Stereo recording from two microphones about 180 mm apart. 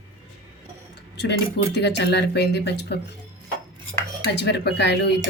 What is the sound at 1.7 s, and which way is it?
Speech, 70° left (ahead or behind).